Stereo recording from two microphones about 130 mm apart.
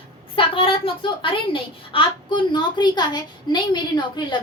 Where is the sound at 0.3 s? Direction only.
45° left (ahead or behind).